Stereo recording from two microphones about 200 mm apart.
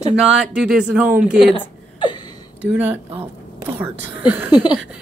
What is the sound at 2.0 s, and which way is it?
Gasp, 20° left (ahead or behind).